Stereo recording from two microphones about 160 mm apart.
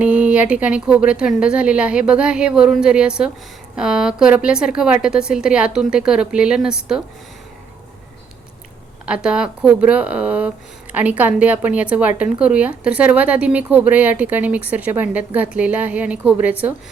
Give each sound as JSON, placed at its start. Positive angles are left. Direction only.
{"t": 0.0, "sound": "a woman's voice", "side_deg": -10}
{"t": 9.0, "sound": "a woman's voice", "side_deg": -5}